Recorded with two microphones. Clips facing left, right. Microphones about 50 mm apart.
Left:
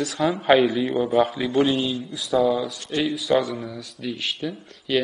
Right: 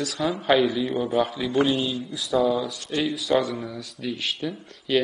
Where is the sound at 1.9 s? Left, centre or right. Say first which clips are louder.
Left 1 dB; centre.